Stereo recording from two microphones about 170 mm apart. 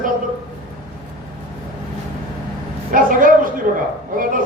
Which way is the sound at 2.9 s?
55° right (ahead or behind).